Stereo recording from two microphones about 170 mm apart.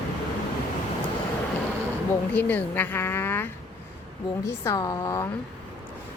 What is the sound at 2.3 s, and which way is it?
A woman's voice, 10° left (ahead or behind).